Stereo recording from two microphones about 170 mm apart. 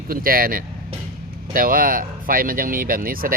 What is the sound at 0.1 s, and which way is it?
Speech, 55° right (ahead or behind).